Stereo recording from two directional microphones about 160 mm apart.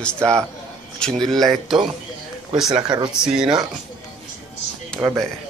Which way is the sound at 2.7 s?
30° right (ahead or behind).